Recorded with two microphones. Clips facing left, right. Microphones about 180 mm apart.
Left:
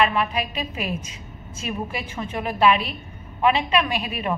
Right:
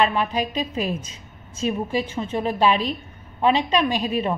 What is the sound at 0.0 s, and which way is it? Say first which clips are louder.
Speech: right 1 dB; 35° right (ahead or behind).